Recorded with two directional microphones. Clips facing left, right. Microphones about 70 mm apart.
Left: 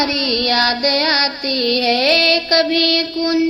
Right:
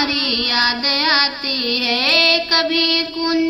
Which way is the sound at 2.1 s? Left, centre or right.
Left.